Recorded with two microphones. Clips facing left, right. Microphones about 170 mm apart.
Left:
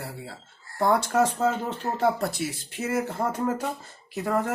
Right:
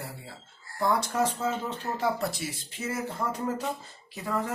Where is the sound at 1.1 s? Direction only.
60° left (ahead or behind).